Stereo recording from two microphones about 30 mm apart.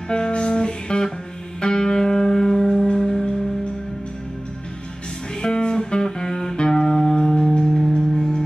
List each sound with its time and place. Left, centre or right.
0.1 s music: left
5.4 s music: left